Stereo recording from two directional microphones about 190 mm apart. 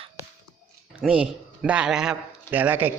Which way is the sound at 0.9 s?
5° right (ahead or behind).